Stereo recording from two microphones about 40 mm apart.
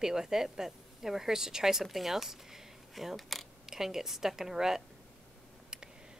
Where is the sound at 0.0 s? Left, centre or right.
Centre.